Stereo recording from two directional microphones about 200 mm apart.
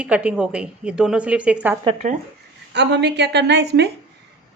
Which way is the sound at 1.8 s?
35° right (ahead or behind).